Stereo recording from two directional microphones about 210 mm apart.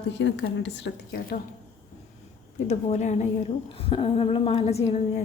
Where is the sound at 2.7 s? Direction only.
30° left (ahead or behind).